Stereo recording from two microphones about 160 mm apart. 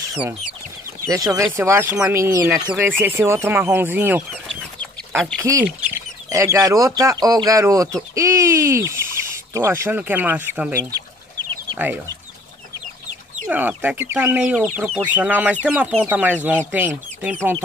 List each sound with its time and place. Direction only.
1.0 s speech: 20° right (ahead or behind)
4.5 s chicken: centre (ahead or behind)
5.4 s speech: 20° right (ahead or behind)
13.5 s speech: 10° right (ahead or behind)